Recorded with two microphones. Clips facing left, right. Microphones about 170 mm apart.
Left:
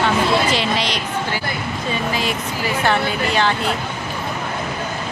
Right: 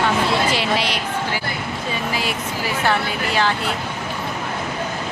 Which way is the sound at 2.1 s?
5° right (ahead or behind).